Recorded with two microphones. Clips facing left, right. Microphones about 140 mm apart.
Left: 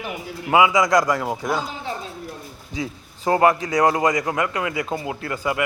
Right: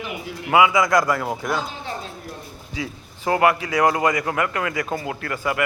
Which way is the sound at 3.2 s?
30° left (ahead or behind).